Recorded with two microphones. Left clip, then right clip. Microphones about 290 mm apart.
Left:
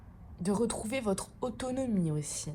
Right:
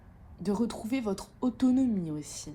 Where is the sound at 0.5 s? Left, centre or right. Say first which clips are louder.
Even; left.